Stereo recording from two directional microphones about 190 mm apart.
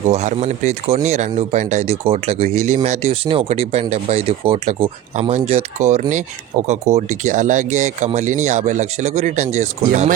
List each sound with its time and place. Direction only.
0.1 s speech: 35° right (ahead or behind)